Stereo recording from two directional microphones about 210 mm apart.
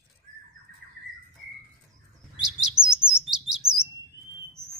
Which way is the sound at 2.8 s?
5° right (ahead or behind).